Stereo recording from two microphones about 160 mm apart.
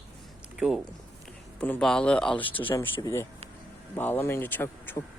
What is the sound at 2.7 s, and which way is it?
Speech, 15° left (ahead or behind).